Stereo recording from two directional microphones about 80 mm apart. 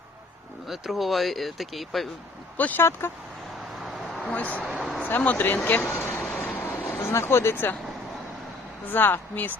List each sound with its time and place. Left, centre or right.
0.7 s speech: centre
2.6 s speech: centre
3.8 s a sound: centre
4.2 s speech: centre
4.7 s speech: centre
5.0 s speech: left
6.4 s vehicle: left
8.9 s speech: left